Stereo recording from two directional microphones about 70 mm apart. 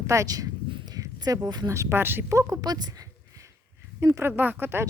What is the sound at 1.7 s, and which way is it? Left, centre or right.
Speech, right.